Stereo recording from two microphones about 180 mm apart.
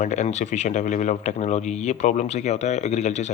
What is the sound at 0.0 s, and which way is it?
Speech, 40° left (ahead or behind).